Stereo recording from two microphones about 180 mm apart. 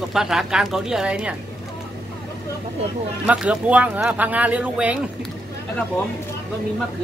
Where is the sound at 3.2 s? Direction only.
5° right (ahead or behind).